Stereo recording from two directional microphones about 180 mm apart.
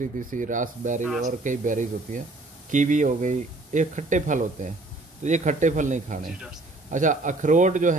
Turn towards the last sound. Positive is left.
turn(degrees=-45)  # may be behind; listen again after turning